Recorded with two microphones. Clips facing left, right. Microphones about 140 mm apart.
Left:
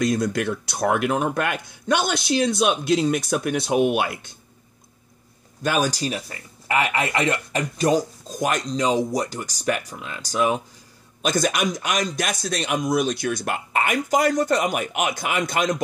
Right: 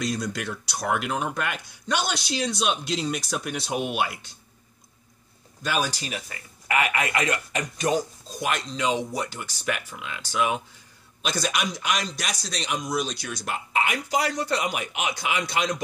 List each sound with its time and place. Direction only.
0.0 s a man's voice: 50° left (ahead or behind)
5.6 s a man's voice: 45° left (ahead or behind)